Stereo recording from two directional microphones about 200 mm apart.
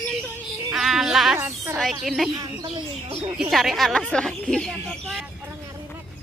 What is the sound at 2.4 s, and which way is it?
Speech, 25° right (ahead or behind).